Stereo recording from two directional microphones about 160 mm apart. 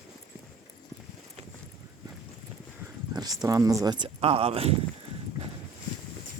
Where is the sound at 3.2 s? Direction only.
25° right (ahead or behind).